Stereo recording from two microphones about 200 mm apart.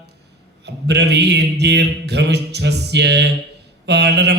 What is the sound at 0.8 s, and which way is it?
Mantra, 55° right (ahead or behind).